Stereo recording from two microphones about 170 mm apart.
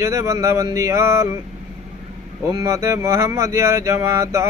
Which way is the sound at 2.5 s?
20° right (ahead or behind).